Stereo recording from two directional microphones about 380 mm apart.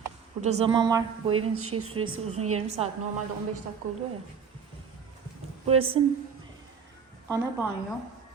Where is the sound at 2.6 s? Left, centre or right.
Centre.